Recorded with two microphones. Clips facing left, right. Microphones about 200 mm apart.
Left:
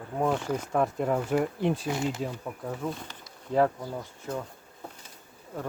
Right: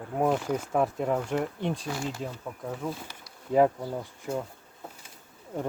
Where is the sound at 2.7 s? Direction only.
10° right (ahead or behind).